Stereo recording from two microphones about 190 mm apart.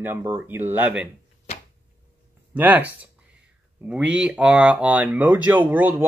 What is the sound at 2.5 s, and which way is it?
Speech, 10° right (ahead or behind).